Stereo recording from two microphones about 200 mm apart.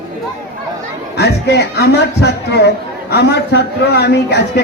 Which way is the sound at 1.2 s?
55° left (ahead or behind).